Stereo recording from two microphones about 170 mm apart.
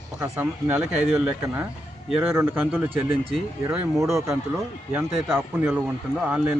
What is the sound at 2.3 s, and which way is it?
Speech, 15° right (ahead or behind).